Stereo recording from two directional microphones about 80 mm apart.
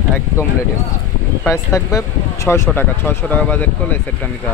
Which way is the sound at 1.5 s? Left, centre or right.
Left.